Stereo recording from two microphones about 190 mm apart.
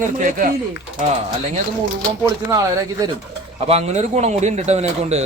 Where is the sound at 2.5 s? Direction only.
20° right (ahead or behind).